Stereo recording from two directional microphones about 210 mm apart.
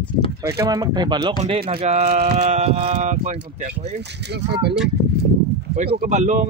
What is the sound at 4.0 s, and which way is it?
Speech, 55° right (ahead or behind).